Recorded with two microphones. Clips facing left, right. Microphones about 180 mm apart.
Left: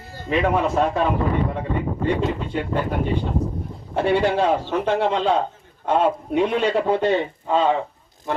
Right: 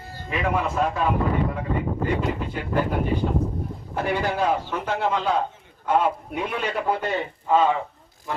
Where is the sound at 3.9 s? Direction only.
30° left (ahead or behind).